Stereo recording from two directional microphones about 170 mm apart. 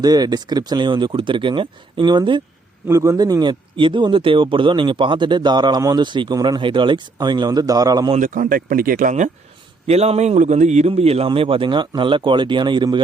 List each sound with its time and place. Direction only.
0.0 s speech: 25° right (ahead or behind)
8.1 s a man's voice: 50° right (ahead or behind); by 13.0 s 25° right (ahead or behind)